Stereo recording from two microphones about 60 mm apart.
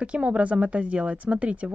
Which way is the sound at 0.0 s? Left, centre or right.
Centre.